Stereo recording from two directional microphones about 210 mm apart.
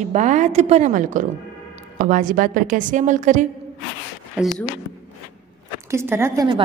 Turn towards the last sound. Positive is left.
turn(degrees=-20)  # may be behind; listen again after turning